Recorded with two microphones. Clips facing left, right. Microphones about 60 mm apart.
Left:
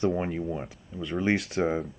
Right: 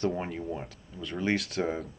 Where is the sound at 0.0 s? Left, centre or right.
Centre.